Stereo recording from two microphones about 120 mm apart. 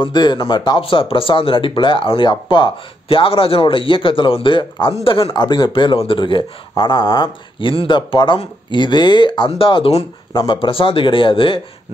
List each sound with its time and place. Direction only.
0.0 s speech: 40° left (ahead or behind)